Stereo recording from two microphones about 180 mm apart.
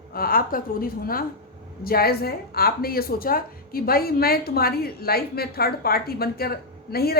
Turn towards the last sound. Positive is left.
turn(degrees=60)  # may be behind; listen again after turning